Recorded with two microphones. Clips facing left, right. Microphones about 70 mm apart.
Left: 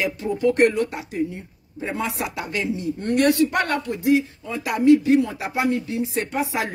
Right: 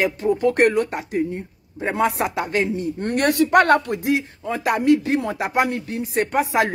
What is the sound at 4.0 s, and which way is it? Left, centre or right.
Speech, right.